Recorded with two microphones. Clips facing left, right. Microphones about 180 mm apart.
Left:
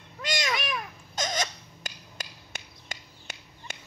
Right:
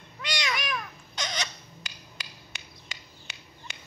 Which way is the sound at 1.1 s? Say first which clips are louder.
Left 4 dB; 45° left (ahead or behind).